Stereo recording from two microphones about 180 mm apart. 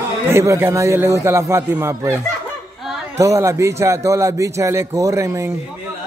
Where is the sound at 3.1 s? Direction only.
15° right (ahead or behind).